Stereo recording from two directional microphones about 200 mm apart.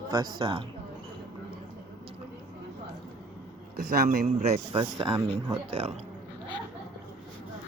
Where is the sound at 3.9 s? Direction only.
50° right (ahead or behind).